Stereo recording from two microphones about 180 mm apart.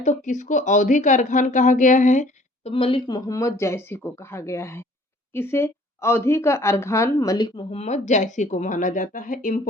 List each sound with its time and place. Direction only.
0.0 s speech: 45° left (ahead or behind)